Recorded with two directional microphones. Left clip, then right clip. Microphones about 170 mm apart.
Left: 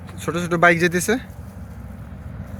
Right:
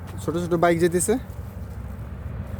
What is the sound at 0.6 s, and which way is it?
Speech, 10° right (ahead or behind).